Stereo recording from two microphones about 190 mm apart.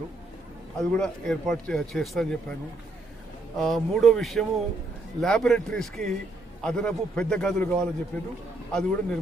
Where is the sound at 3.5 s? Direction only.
Centre (ahead or behind).